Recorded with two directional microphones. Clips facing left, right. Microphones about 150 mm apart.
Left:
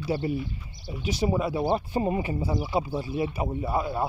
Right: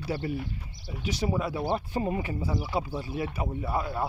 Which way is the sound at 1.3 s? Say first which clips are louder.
Left 4 dB; 20° left (ahead or behind).